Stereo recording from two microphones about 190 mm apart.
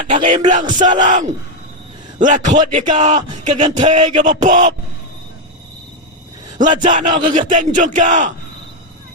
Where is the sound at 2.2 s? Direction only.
40° right (ahead or behind).